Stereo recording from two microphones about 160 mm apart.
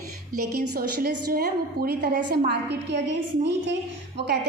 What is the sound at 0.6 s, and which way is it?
A woman's voice, 70° right (ahead or behind).